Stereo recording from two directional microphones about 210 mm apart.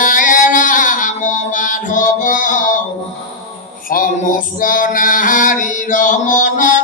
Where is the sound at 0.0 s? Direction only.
40° left (ahead or behind).